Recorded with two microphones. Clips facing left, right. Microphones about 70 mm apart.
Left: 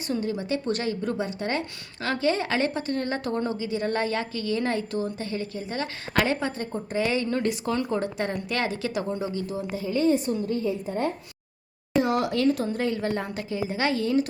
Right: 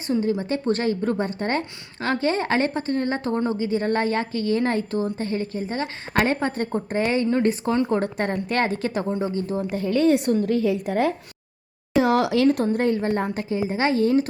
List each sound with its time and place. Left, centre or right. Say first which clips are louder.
0.1 s a woman's voice: right 5 dB; right
7.9 s a woman's voice: right 4 dB; right
9.7 s a woman's voice: right 4 dB; right
12.6 s a woman's voice: right 5 dB; right